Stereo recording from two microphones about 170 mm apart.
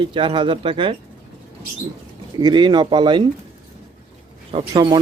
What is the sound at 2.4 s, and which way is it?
Speech, 25° right (ahead or behind).